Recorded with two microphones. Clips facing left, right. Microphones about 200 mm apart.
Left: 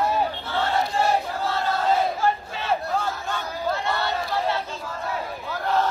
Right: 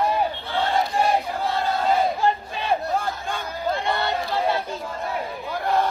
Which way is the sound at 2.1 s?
15° right (ahead or behind).